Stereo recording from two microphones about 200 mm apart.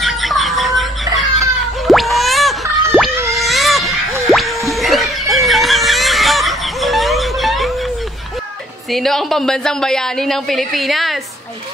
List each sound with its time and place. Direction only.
0.0 s music: centre (ahead or behind)
3.3 s a sound: centre (ahead or behind)
8.9 s a woman's voice: centre (ahead or behind)